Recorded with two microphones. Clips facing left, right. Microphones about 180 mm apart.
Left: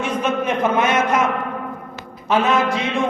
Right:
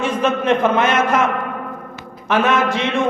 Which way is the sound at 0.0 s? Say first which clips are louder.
Right 2 dB; 90° right.